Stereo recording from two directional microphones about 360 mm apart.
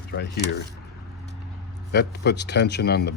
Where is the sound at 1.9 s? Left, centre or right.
Left.